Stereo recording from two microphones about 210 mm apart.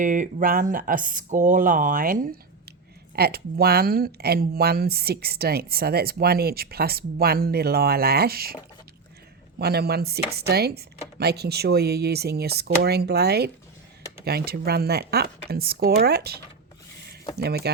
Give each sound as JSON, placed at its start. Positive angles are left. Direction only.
{"t": 0.0, "sound": "speech", "side_deg": -40}
{"t": 9.6, "sound": "speech", "side_deg": -50}
{"t": 17.4, "sound": "speech", "side_deg": -50}